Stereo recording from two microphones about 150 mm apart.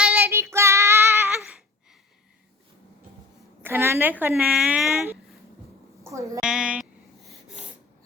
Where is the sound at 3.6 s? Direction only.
15° right (ahead or behind).